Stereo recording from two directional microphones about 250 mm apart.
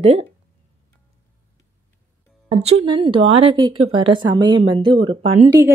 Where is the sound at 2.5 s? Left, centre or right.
Centre.